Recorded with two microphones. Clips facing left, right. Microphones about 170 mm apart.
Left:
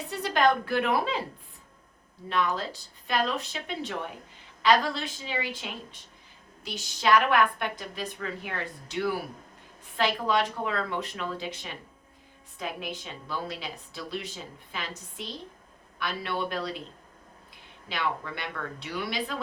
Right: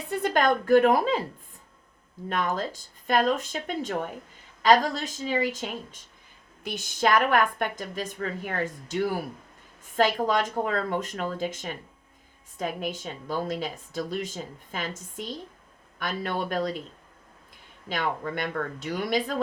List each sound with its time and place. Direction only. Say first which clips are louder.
0.1 s a woman's voice: right 1 dB; 50° right (ahead or behind)
2.3 s a woman's voice: even; 45° right (ahead or behind)
17.8 s a woman's voice: right 3 dB; 45° right (ahead or behind)